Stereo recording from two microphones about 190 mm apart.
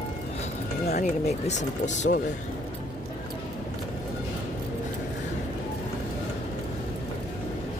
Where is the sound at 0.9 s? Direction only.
40° left (ahead or behind).